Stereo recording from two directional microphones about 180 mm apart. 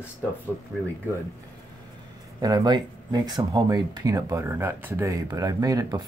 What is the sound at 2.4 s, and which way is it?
Speech, 20° right (ahead or behind).